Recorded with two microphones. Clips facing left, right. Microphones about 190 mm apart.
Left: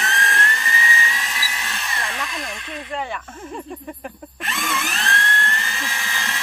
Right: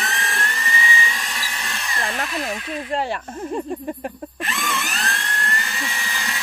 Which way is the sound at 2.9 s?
35° right (ahead or behind).